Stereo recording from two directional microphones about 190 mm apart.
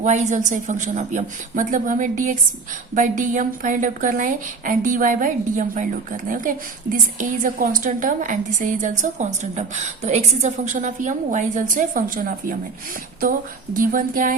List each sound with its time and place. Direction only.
0.0 s a woman's voice: 40° right (ahead or behind)
13.7 s a woman's voice: 45° right (ahead or behind)